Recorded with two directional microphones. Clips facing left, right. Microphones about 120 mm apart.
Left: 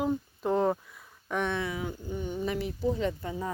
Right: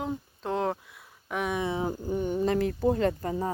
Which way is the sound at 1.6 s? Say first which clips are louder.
Right 4 dB; 30° right (ahead or behind).